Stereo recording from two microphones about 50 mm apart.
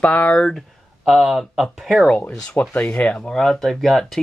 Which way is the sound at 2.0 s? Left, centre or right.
Left.